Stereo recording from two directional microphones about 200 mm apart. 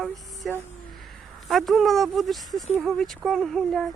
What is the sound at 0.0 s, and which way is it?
Speech, centre (ahead or behind).